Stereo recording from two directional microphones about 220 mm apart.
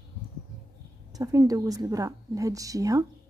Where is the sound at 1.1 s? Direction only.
15° right (ahead or behind).